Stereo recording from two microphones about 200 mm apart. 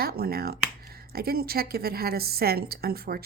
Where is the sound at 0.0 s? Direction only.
50° right (ahead or behind).